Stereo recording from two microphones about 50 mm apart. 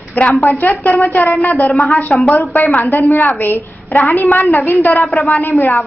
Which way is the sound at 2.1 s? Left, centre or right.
Centre.